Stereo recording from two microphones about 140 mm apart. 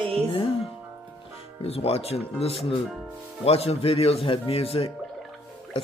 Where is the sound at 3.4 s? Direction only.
45° left (ahead or behind).